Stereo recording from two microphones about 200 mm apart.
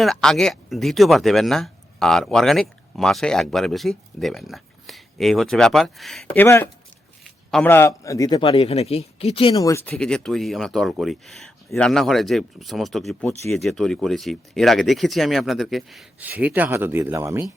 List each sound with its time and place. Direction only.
0.0 s a man's voice: centre (ahead or behind)
9.9 s speech: 5° left (ahead or behind); by 17.4 s 15° right (ahead or behind)